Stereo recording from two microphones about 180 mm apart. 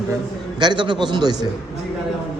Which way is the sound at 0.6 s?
25° right (ahead or behind).